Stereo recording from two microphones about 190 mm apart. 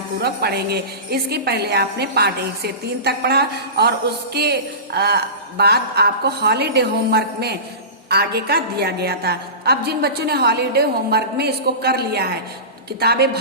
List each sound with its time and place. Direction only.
0.2 s a woman's voice: 55° right (ahead or behind)